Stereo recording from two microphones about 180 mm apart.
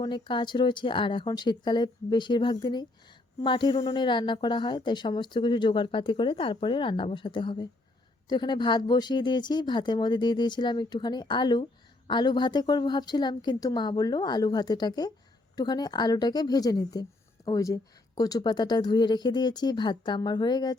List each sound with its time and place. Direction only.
0.0 s a woman's voice: 25° left (ahead or behind)